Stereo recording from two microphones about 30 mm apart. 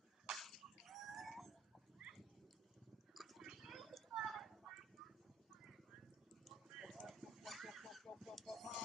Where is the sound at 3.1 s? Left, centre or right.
Centre.